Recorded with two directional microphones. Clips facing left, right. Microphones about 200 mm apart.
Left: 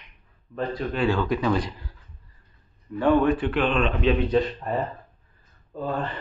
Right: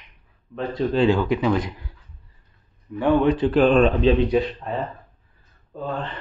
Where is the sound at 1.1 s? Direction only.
15° right (ahead or behind).